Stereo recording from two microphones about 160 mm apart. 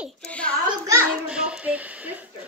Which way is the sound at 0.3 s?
5° left (ahead or behind).